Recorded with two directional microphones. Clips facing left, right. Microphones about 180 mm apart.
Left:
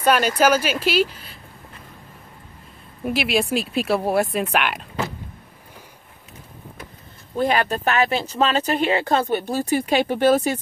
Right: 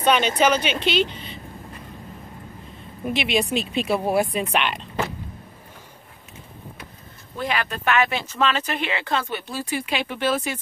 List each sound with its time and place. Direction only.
0.0 s speech: 5° left (ahead or behind)
3.1 s speech: 5° left (ahead or behind)
7.3 s speech: 40° left (ahead or behind)